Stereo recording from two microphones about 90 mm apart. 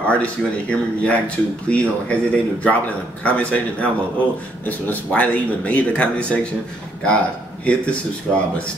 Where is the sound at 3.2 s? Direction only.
15° left (ahead or behind).